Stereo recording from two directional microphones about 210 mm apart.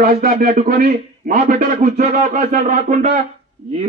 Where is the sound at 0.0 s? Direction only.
45° right (ahead or behind).